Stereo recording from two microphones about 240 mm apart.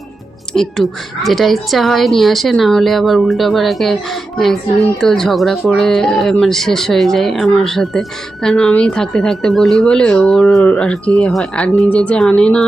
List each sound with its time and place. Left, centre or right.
0.5 s speech: centre